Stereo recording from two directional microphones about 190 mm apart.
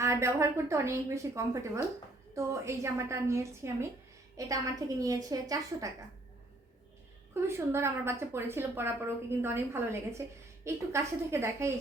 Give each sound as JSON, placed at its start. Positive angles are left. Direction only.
{"t": 0.0, "sound": "a woman's voice", "side_deg": -15}
{"t": 7.3, "sound": "a woman's voice", "side_deg": -15}